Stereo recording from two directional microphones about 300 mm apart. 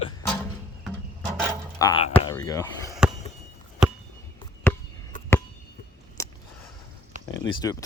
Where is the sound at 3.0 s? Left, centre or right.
Centre.